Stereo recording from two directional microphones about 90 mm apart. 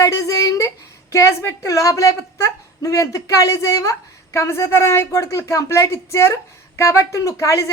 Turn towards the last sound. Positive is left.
turn(degrees=35)  # may be behind; listen again after turning